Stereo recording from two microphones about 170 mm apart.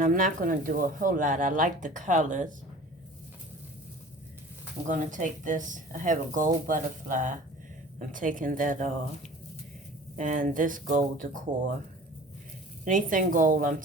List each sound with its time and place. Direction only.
0.0 s speech: 50° right (ahead or behind)
4.9 s speech: 50° right (ahead or behind)
10.2 s speech: 50° right (ahead or behind)
12.8 s speech: 50° right (ahead or behind)